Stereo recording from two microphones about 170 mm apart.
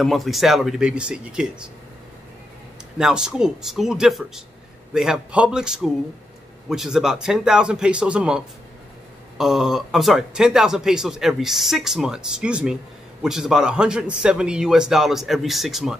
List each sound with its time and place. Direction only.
0.0 s speech: centre (ahead or behind)
3.0 s speech: 5° right (ahead or behind)